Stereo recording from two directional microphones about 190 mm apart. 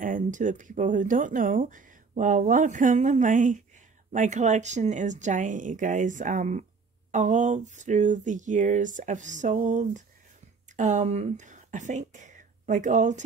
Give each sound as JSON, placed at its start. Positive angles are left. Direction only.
{"t": 0.0, "sound": "speech", "side_deg": -45}
{"t": 4.1, "sound": "a sound", "side_deg": -40}
{"t": 10.8, "sound": "speech", "side_deg": -40}